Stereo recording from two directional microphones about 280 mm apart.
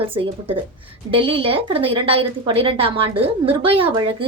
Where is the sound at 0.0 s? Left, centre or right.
Centre.